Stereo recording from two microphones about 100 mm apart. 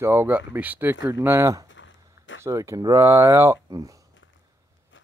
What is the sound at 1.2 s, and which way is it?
Speech, 30° right (ahead or behind).